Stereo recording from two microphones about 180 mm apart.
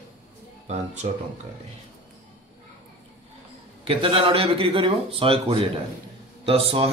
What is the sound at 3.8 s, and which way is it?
Speech, 30° right (ahead or behind).